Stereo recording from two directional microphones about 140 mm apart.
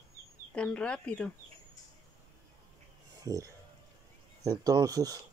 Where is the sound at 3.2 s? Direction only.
25° right (ahead or behind).